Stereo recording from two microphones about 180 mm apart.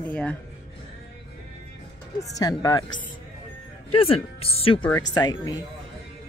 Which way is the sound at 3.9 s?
30° left (ahead or behind).